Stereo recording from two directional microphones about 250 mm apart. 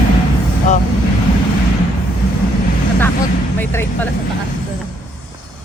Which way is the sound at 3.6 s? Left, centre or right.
Centre.